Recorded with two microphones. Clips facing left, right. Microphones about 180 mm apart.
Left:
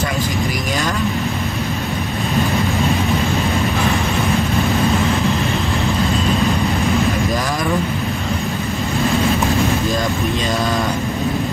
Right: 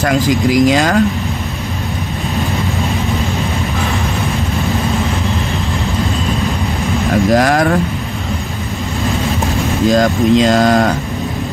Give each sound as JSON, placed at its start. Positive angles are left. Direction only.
{"t": 0.0, "sound": "speech", "side_deg": -90}
{"t": 7.3, "sound": "vehicle", "side_deg": -85}
{"t": 9.9, "sound": "a sound", "side_deg": -90}